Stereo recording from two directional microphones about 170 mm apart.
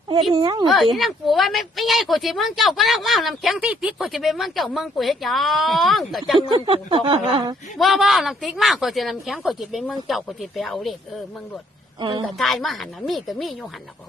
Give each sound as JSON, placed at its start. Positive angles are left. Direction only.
{"t": 0.1, "sound": "a woman's voice", "side_deg": -30}
{"t": 0.7, "sound": "speech", "side_deg": 0}
{"t": 6.5, "sound": "speech", "side_deg": -30}
{"t": 7.8, "sound": "speech", "side_deg": 0}
{"t": 11.9, "sound": "a woman's voice", "side_deg": -25}
{"t": 12.4, "sound": "speech", "side_deg": 0}